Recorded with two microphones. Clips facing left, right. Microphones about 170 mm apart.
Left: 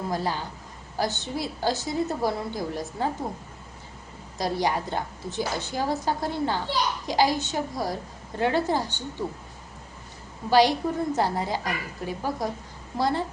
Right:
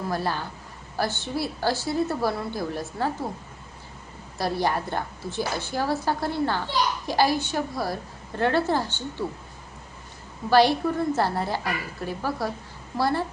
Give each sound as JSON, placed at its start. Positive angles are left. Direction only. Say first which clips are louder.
{"t": 0.1, "sound": "a woman's voice", "louder": "right 1 dB", "side_deg": 15}
{"t": 4.4, "sound": "a woman's voice", "louder": "right 1 dB", "side_deg": 15}
{"t": 10.5, "sound": "a woman's voice", "louder": "right 1 dB", "side_deg": 15}